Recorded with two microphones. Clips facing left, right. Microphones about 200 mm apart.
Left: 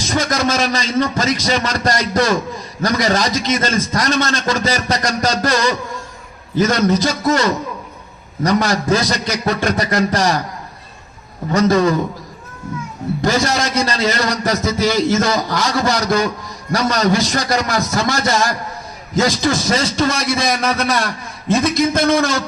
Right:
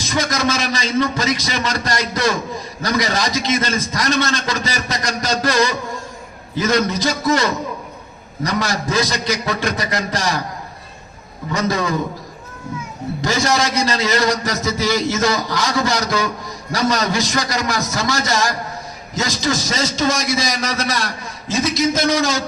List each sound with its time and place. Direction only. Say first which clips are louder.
0.1 s a man's voice: left 2 dB; 50° left (ahead or behind)
6.6 s a man's voice: left 3 dB; 50° left (ahead or behind)
8.4 s a man's voice: left 6 dB; 50° left (ahead or behind)
11.5 s a man's voice: left 7 dB; 50° left (ahead or behind)
13.2 s a man's voice: left 1 dB; 50° left (ahead or behind)